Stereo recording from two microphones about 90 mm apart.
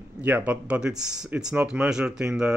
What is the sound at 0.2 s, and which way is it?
Speech, 15° right (ahead or behind).